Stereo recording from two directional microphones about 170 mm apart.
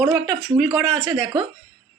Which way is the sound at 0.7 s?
Centre (ahead or behind).